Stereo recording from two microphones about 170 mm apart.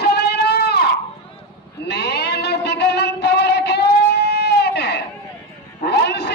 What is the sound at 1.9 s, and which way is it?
Music, 80° left.